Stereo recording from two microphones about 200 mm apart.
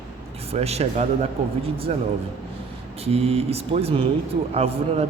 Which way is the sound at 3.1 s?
30° right (ahead or behind).